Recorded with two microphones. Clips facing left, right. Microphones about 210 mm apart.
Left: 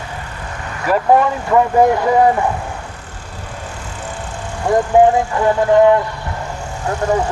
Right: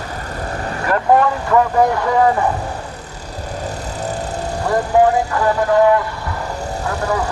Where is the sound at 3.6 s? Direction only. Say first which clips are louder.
Right 6 dB; 40° right (ahead or behind).